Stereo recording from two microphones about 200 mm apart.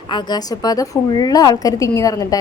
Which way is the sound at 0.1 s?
20° left (ahead or behind).